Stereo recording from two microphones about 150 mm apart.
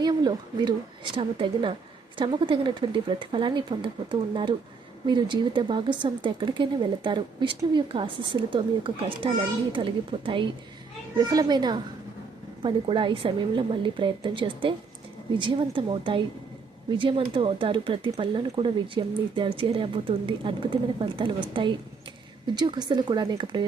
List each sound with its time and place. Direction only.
0.0 s a woman's voice: 30° right (ahead or behind)